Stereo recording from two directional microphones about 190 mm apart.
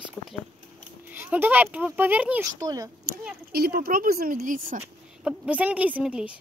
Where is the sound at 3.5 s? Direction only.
55° right (ahead or behind).